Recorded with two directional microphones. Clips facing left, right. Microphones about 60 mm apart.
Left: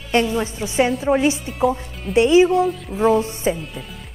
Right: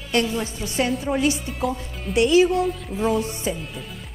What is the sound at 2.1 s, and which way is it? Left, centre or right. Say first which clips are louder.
Speech: left 3 dB; left.